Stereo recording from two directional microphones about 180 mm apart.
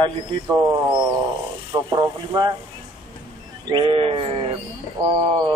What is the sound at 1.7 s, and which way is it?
Speech, 25° right (ahead or behind).